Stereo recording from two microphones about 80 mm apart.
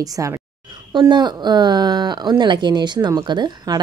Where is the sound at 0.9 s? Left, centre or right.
Right.